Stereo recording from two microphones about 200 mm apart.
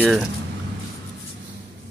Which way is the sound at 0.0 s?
Centre (ahead or behind).